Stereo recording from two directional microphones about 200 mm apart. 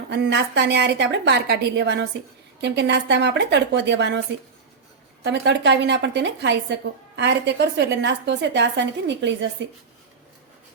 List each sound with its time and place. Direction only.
0.1 s a woman's voice: 60° right (ahead or behind)
5.2 s a woman's voice: 60° right (ahead or behind)